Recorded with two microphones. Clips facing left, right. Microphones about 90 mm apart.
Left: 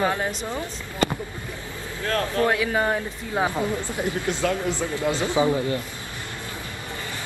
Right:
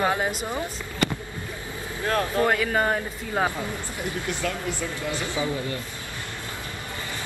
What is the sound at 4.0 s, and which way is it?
A man's voice, 20° left (ahead or behind).